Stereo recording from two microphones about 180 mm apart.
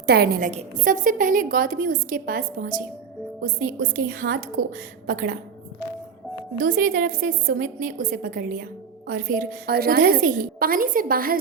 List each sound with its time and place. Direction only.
0.0 s a woman's voice: 60° right (ahead or behind)
6.7 s a woman's voice: 45° right (ahead or behind)